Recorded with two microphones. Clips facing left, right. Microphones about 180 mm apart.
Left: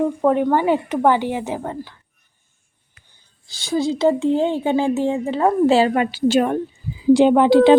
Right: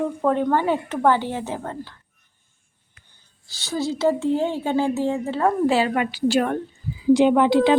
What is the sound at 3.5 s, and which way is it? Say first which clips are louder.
A woman's voice: left 5 dB; 15° left (ahead or behind).